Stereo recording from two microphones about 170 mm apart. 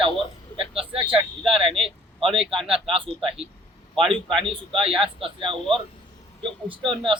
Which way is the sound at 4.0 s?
Centre (ahead or behind).